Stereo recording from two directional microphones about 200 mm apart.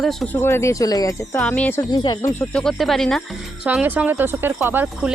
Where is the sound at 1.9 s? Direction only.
20° left (ahead or behind).